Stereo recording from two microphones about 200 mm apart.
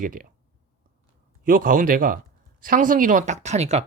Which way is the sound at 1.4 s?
45° right (ahead or behind).